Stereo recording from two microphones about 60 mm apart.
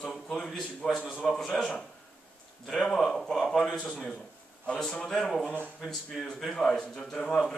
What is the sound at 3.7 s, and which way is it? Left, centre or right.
Speech, centre.